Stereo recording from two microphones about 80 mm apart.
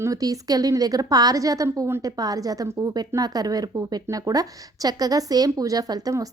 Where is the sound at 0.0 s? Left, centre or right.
Right.